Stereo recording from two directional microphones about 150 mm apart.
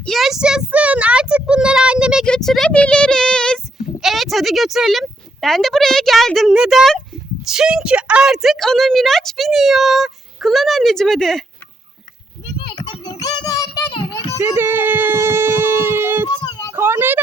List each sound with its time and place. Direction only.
0.0 s a sound: centre (ahead or behind)
2.2 s a woman's voice: 5° left (ahead or behind)
12.7 s child singing: 30° left (ahead or behind)
14.4 s speech: 15° right (ahead or behind)